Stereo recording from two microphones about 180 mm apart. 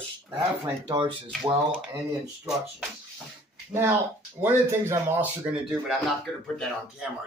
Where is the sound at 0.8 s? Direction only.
25° right (ahead or behind).